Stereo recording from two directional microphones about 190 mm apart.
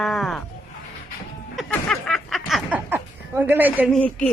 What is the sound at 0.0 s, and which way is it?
Sheep, centre (ahead or behind).